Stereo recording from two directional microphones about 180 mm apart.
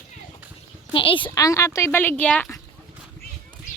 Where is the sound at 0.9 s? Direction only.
30° left (ahead or behind); by 2.6 s 5° left (ahead or behind).